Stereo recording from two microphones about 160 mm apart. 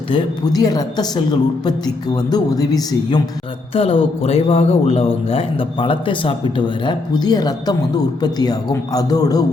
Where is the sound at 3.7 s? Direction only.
35° left (ahead or behind).